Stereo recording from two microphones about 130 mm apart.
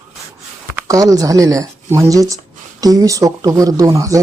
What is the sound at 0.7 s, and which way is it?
Speech, 25° right (ahead or behind).